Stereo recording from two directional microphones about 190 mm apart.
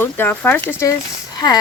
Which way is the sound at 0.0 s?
10° left (ahead or behind).